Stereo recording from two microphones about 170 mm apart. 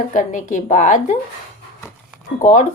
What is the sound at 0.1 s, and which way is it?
A woman's voice, 50° left (ahead or behind).